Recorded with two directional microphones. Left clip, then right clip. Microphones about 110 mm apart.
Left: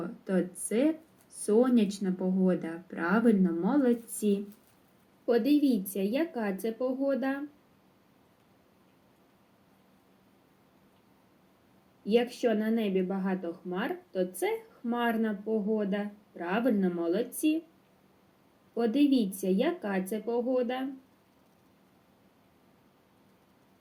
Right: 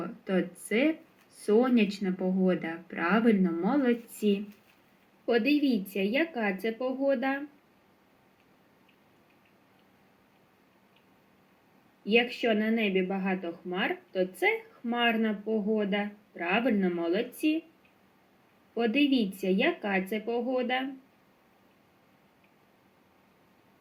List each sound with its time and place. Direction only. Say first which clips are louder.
0.0 s speech: right 1 dB; 20° left (ahead or behind)
12.1 s speech: right 1 dB; 20° left (ahead or behind)
18.7 s speech: even; 20° left (ahead or behind)